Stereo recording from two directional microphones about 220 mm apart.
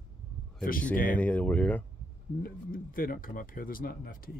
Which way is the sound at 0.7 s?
40° left (ahead or behind).